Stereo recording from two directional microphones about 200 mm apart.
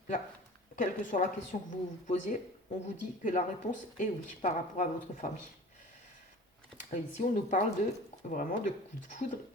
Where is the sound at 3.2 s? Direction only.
40° left (ahead or behind).